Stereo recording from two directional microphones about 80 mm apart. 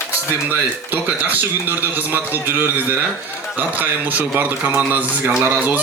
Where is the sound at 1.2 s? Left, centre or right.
Right.